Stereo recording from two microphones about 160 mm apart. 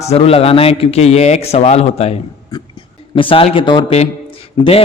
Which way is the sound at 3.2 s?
35° left (ahead or behind).